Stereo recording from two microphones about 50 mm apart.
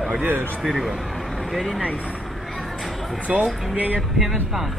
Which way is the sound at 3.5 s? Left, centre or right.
Centre.